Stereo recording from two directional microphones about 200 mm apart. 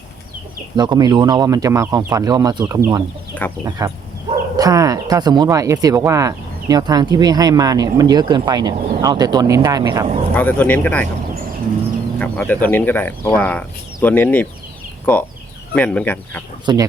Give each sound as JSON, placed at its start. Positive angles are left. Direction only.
{"t": 0.8, "sound": "speech", "side_deg": -20}
{"t": 3.3, "sound": "speech", "side_deg": 5}
{"t": 3.8, "sound": "speech", "side_deg": -20}
{"t": 10.3, "sound": "speech", "side_deg": 10}
{"t": 12.2, "sound": "speech", "side_deg": 5}
{"t": 16.7, "sound": "speech", "side_deg": -20}